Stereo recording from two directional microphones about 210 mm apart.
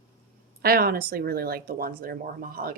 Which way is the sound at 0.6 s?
45° right (ahead or behind).